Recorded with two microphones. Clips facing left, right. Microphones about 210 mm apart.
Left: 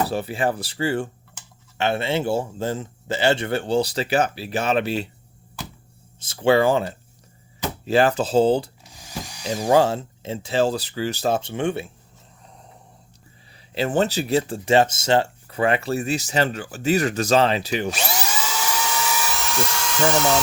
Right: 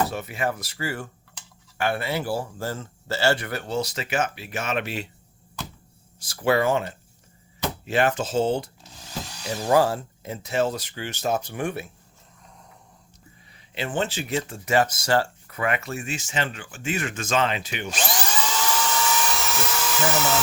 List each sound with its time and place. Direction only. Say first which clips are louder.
0.1 s a man's voice: left 5 dB; 30° left (ahead or behind)
6.1 s a man's voice: left 4 dB; 25° left (ahead or behind)
9.0 s drill: left 1 dB; 10° left (ahead or behind)
9.7 s a man's voice: left 2 dB; 25° left (ahead or behind)
13.7 s speech: left 6 dB; 40° left (ahead or behind)
17.9 s dental drill: even; 5° left (ahead or behind)